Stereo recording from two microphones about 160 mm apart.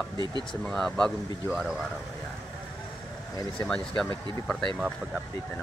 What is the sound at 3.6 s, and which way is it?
Speech, 5° left (ahead or behind).